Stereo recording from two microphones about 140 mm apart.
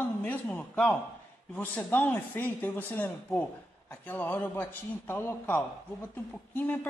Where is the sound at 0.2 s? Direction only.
10° left (ahead or behind).